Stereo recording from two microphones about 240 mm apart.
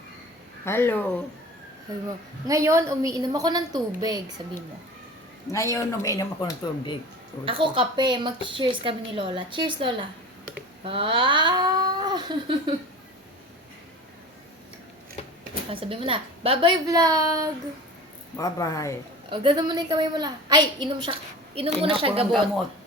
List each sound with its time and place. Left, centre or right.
0.6 s speech: centre
2.5 s a woman's voice: centre
5.5 s speech: centre
7.4 s a woman's voice: right
10.8 s cat: right
15.7 s a woman's voice: right
18.3 s speech: centre
19.3 s a woman's voice: right